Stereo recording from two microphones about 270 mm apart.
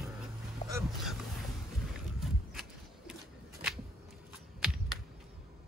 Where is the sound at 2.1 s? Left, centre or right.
Centre.